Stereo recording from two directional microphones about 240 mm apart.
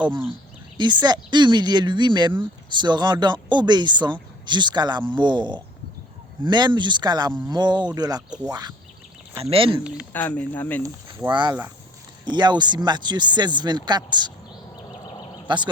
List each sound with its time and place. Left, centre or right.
0.1 s speech: right
10.1 s speech: centre
10.8 s speech: centre
15.4 s speech: centre